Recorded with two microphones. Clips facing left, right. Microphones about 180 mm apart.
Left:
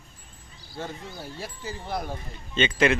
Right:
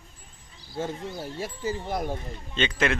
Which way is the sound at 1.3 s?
45° right (ahead or behind).